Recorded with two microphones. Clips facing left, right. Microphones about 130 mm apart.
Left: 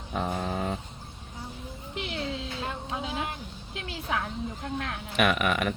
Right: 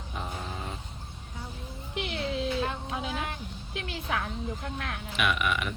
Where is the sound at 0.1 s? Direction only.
60° left (ahead or behind).